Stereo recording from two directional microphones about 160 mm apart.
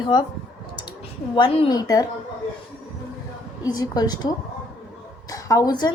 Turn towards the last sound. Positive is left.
turn(degrees=25)  # may be behind; listen again after turning